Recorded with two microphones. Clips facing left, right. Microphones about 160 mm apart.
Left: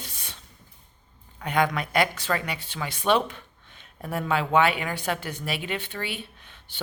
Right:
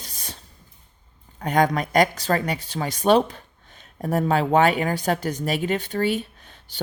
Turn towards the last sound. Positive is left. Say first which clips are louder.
# right 2 dB
turn(degrees=-40)  # may be behind; listen again after turning